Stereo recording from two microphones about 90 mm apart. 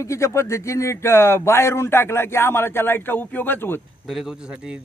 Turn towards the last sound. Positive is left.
turn(degrees=-5)  # may be behind; listen again after turning